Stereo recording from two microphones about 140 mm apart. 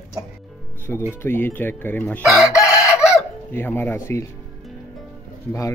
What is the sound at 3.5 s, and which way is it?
Speech, 15° left (ahead or behind).